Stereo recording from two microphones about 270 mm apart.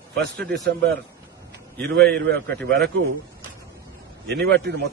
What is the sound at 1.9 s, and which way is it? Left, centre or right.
A man's voice, right.